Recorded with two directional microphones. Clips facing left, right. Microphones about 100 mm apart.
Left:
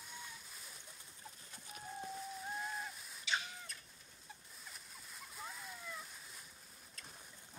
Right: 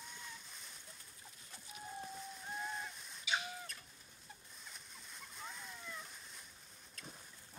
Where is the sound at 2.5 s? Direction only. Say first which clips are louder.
Right 3 dB; centre (ahead or behind).